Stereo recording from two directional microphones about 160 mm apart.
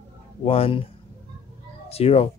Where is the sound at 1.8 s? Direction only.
40° left (ahead or behind).